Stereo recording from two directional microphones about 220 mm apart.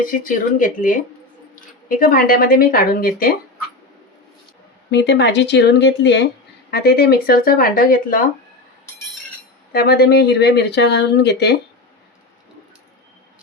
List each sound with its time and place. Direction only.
0.0 s speech: 40° left (ahead or behind)
4.9 s speech: 50° left (ahead or behind)
9.7 s speech: 45° left (ahead or behind)